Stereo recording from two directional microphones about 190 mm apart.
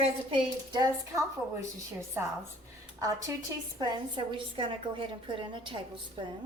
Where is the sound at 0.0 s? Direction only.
25° right (ahead or behind).